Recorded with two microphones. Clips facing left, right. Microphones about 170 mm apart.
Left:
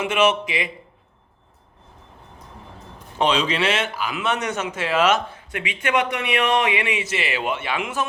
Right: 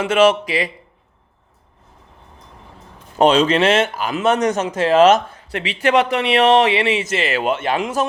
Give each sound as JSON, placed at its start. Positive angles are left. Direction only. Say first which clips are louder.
{"t": 0.1, "sound": "speech", "louder": "right 7 dB", "side_deg": -40}
{"t": 3.2, "sound": "speech", "louder": "right 7 dB", "side_deg": -45}